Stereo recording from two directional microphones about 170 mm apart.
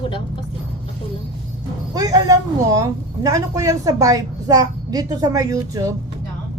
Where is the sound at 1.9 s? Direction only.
20° right (ahead or behind).